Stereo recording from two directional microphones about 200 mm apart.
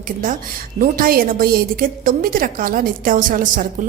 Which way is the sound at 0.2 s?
45° right (ahead or behind).